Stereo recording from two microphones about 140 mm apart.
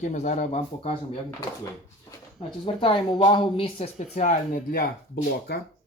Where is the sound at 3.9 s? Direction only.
55° left (ahead or behind); by 4.9 s 75° left (ahead or behind).